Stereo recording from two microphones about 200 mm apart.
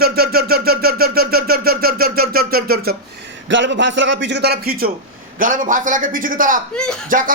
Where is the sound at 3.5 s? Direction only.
65° right (ahead or behind); by 4.9 s 50° right (ahead or behind).